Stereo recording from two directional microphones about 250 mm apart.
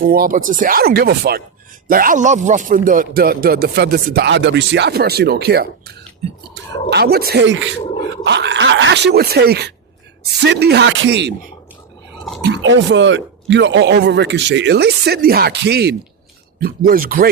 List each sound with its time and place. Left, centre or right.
0.0 s speech: right